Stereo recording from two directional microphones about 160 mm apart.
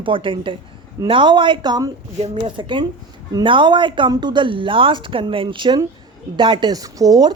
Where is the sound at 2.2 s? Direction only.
35° right (ahead or behind).